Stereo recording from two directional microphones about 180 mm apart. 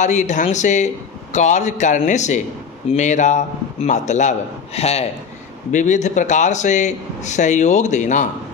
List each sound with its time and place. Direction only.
0.0 s a man's voice: 40° left (ahead or behind)